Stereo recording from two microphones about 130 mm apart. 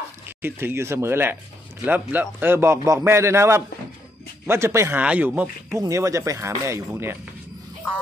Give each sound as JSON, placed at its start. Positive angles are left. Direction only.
{"t": 0.4, "sound": "a man's voice", "side_deg": -15}
{"t": 5.0, "sound": "speech", "side_deg": -10}
{"t": 5.8, "sound": "a man's voice", "side_deg": -25}